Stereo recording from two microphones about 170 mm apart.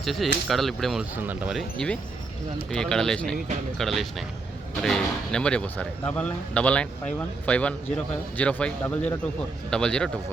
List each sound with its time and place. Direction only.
0.0 s speech: centre (ahead or behind)
1.1 s speech: 10° right (ahead or behind)